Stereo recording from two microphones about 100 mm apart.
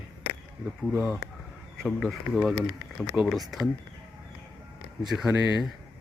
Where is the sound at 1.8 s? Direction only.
5° left (ahead or behind).